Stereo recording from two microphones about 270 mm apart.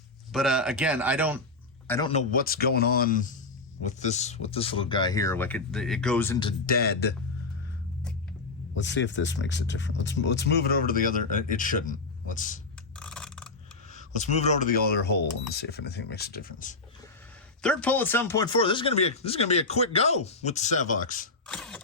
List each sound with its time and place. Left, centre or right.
0.3 s speech: centre
1.9 s speech: centre
2.1 s speech: left; by 6.5 s centre
6.7 s speech: left
8.7 s speech: left
13.0 s a sound: centre
13.9 s speech: left
17.6 s speech: centre; by 21.2 s left
21.4 s mechanisms: centre